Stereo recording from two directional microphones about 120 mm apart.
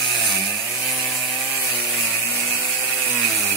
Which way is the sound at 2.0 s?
15° left (ahead or behind).